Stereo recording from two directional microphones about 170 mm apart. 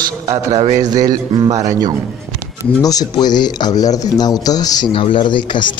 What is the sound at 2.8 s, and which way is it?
Speech, 20° left (ahead or behind).